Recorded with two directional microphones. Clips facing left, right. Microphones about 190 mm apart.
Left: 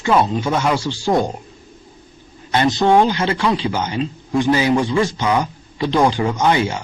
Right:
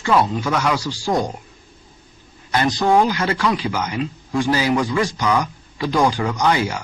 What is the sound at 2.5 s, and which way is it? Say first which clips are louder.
A man's voice: left 2 dB; 25° left (ahead or behind).